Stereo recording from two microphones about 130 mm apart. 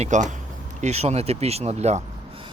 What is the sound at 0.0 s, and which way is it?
Speech, 70° right (ahead or behind).